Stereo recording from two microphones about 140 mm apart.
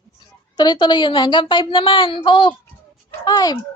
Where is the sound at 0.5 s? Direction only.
30° left (ahead or behind).